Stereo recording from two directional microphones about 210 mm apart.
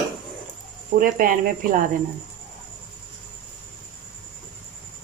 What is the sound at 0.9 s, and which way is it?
Speech, 40° right (ahead or behind).